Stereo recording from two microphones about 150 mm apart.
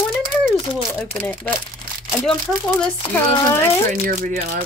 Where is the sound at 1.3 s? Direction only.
10° left (ahead or behind).